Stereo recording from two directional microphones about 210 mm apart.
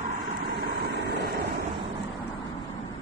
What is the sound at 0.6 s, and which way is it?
Vehicle, 50° right (ahead or behind).